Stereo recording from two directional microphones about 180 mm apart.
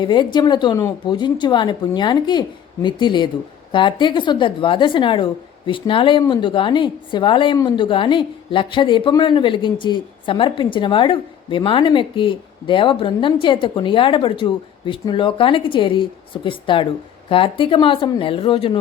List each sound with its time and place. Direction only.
0.0 s a woman's voice: 25° left (ahead or behind)